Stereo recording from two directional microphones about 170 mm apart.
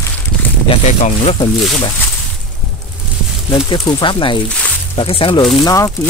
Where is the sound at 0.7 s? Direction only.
35° left (ahead or behind).